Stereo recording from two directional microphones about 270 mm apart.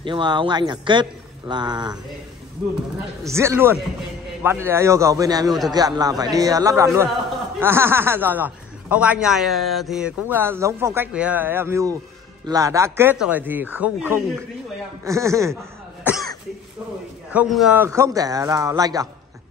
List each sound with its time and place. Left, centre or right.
0.0 s speech: centre
3.3 s speech: centre
16.0 s cough: centre
17.3 s speech: centre